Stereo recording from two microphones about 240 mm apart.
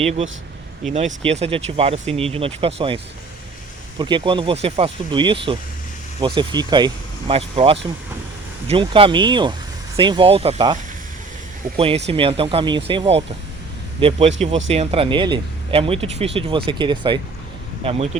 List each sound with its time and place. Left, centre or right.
0.0 s speech: right
11.8 s speech: right